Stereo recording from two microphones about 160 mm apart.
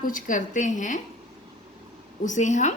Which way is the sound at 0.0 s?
55° left (ahead or behind).